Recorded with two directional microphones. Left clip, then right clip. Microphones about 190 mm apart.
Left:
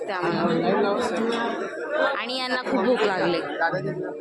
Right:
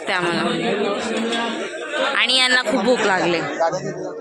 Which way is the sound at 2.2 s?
Centre (ahead or behind).